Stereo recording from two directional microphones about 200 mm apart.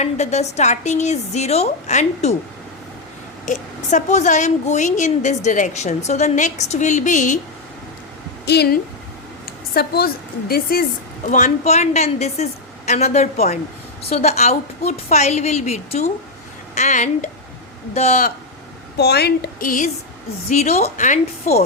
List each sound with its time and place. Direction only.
0.0 s a woman's voice: 35° left (ahead or behind)
3.4 s a woman's voice: 40° left (ahead or behind)
8.4 s a woman's voice: 55° left (ahead or behind)
11.3 s a woman's voice: 35° left (ahead or behind)
18.9 s a woman's voice: 55° left (ahead or behind)